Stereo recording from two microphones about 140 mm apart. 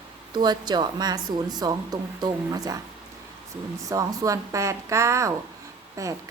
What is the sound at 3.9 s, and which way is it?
A woman's voice, 25° right (ahead or behind).